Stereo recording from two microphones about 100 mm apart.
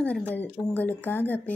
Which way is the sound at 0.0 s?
15° left (ahead or behind).